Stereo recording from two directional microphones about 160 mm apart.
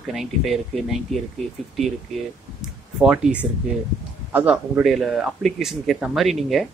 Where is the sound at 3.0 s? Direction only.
10° right (ahead or behind).